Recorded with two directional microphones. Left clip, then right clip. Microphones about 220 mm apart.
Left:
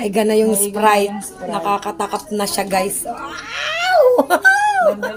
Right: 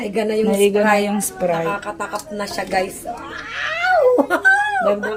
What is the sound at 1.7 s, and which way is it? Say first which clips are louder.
Speech: left 4 dB; 45° left (ahead or behind).